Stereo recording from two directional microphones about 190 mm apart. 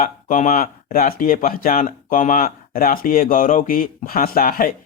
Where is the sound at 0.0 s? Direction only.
40° left (ahead or behind).